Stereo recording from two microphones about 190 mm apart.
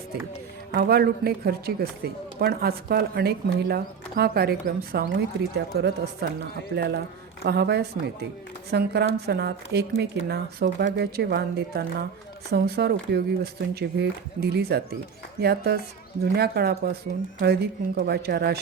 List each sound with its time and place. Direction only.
0.7 s a woman's voice: 55° right (ahead or behind)